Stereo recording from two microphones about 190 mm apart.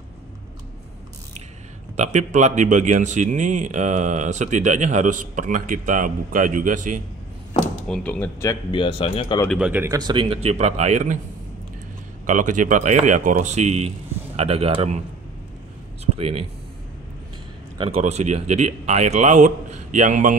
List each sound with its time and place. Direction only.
2.0 s speech: 40° right (ahead or behind)
7.9 s speech: 5° left (ahead or behind)
8.7 s speech: 30° left (ahead or behind)
9.5 s speech: 5° right (ahead or behind); by 11.1 s 40° right (ahead or behind)
12.3 s speech: 45° right (ahead or behind)
16.2 s speech: 30° right (ahead or behind)
17.7 s speech: 30° right (ahead or behind)